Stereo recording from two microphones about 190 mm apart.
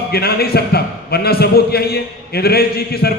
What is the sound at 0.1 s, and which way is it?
A man's voice, 55° left (ahead or behind).